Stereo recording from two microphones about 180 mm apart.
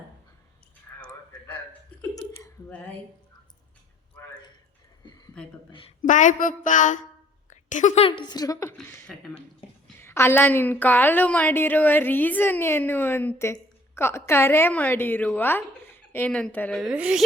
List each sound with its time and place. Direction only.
0.9 s a sound: 10° left (ahead or behind)
2.0 s hiccup: 10° left (ahead or behind)
5.0 s a sound: 25° left (ahead or behind)
6.0 s a woman's voice: 45° left (ahead or behind); by 9.0 s 15° left (ahead or behind)
9.0 s speech: centre (ahead or behind)
10.0 s a woman's voice: 15° left (ahead or behind); by 17.2 s 5° right (ahead or behind)